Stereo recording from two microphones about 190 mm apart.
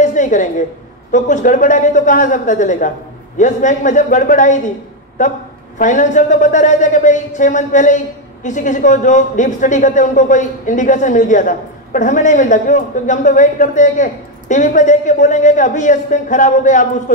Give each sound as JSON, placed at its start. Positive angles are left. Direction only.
{"t": 0.0, "sound": "a sound", "side_deg": 40}
{"t": 1.1, "sound": "a man's voice", "side_deg": 40}
{"t": 5.8, "sound": "a man's voice", "side_deg": 40}